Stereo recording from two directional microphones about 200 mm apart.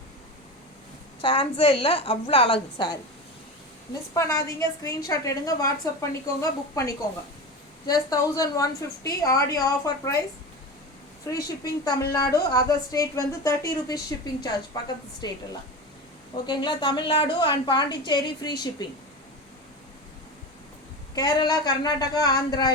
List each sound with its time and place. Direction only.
1.2 s a woman's voice: 25° left (ahead or behind)
4.1 s a woman's voice: 15° left (ahead or behind)
11.3 s a woman's voice: 20° left (ahead or behind)
15.2 s a woman's voice: 20° left (ahead or behind)
16.5 s a woman's voice: 20° left (ahead or behind)
21.2 s a woman's voice: 20° left (ahead or behind)